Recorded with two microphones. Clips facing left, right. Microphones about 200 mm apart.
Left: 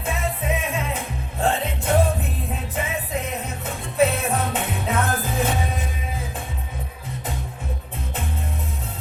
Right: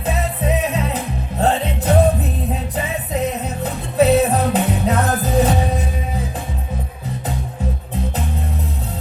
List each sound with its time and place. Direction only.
0.0 s music: 40° right (ahead or behind)
3.6 s music: 40° right (ahead or behind)